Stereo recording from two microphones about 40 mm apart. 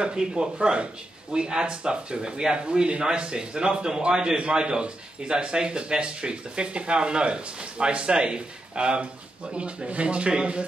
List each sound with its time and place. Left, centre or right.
0.0 s speech: right